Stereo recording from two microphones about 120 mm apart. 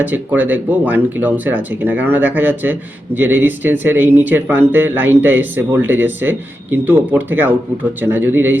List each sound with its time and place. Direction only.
0.0 s speech: 15° right (ahead or behind)